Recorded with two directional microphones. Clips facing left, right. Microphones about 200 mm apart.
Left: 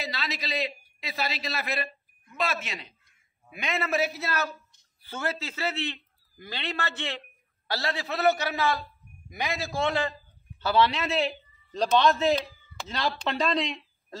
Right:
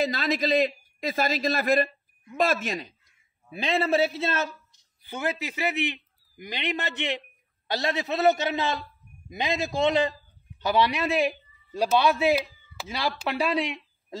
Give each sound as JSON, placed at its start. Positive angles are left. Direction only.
{"t": 0.0, "sound": "a man's voice", "side_deg": -50}
{"t": 3.4, "sound": "a man's voice", "side_deg": -30}